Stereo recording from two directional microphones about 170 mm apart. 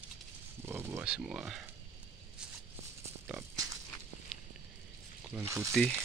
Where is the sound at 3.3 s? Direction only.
15° right (ahead or behind).